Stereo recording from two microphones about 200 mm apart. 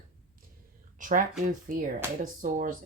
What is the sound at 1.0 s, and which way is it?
Speech, 40° right (ahead or behind).